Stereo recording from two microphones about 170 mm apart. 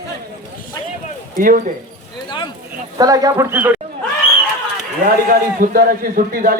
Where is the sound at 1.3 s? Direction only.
55° right (ahead or behind).